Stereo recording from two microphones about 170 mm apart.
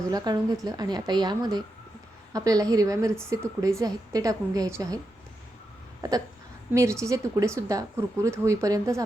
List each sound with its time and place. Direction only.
0.1 s a woman's voice: 20° right (ahead or behind)
6.0 s hiccup: 20° right (ahead or behind)
6.7 s speech: 15° right (ahead or behind)